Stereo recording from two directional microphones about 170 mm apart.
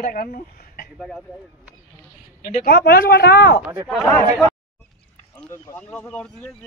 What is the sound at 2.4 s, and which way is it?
Speech, 60° left (ahead or behind).